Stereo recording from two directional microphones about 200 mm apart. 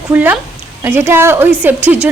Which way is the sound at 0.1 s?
10° right (ahead or behind).